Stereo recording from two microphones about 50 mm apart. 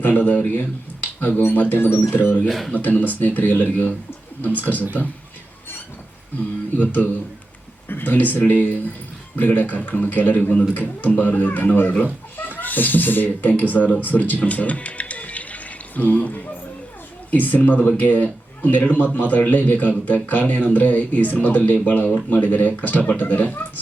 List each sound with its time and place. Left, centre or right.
0.0 s speech: left
1.0 s a sound: left
1.5 s speech: left
2.5 s speech: centre
2.7 s speech: left
6.7 s speech: left
14.0 s music: left
17.3 s speech: left